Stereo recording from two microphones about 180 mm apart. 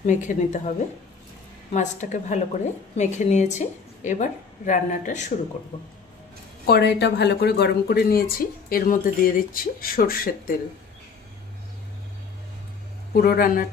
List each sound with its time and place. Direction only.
0.0 s a woman's voice: 45° left (ahead or behind)
1.7 s a woman's voice: 40° left (ahead or behind)
6.6 s speech: 65° left (ahead or behind)
13.1 s speech: 55° left (ahead or behind)